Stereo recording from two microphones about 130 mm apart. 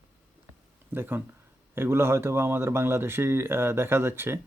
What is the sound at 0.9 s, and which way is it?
Speech, 15° right (ahead or behind).